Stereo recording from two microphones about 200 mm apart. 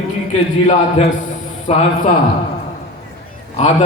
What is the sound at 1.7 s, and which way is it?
Speech, 30° left (ahead or behind).